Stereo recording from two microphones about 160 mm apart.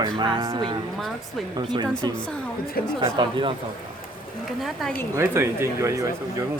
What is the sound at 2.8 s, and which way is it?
Speech, 70° left (ahead or behind).